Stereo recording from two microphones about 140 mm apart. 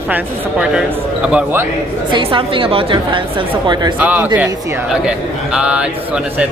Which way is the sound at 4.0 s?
10° right (ahead or behind).